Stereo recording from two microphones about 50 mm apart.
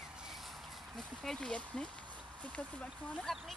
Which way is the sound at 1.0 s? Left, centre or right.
Centre.